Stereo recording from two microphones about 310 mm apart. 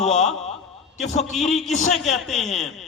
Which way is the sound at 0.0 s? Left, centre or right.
Left.